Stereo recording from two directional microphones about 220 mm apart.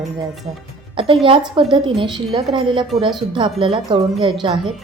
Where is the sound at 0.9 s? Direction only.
25° right (ahead or behind).